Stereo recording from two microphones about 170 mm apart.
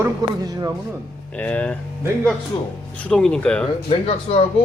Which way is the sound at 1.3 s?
5° left (ahead or behind).